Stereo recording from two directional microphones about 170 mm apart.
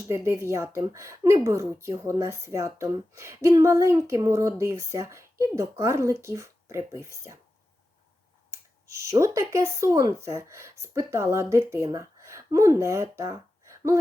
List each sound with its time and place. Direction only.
0.1 s a woman's voice: 15° right (ahead or behind)
8.4 s speech: 15° right (ahead or behind)